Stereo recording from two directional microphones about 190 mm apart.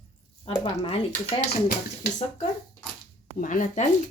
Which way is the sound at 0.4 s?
30° left (ahead or behind).